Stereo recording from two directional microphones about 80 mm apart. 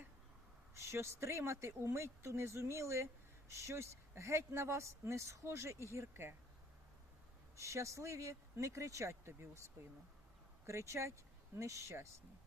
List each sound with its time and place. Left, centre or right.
0.7 s speech: right
7.5 s speech: right
10.7 s speech: right